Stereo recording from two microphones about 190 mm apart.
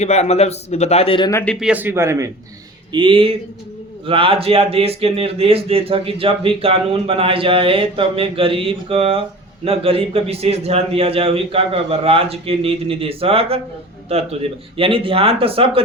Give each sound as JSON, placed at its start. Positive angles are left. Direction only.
{"t": 0.0, "sound": "a man's voice", "side_deg": 35}
{"t": 1.3, "sound": "speech", "side_deg": 10}
{"t": 1.5, "sound": "a man's voice", "side_deg": -5}
{"t": 2.9, "sound": "a man's voice", "side_deg": -25}